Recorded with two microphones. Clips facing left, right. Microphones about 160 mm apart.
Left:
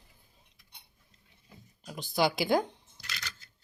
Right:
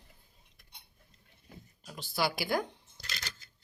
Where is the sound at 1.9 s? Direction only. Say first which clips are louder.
Left 5 dB; 15° left (ahead or behind).